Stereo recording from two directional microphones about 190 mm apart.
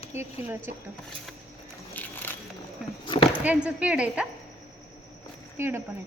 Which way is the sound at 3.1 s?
25° left (ahead or behind).